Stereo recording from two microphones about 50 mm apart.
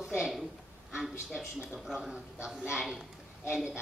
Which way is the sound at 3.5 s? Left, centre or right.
Centre.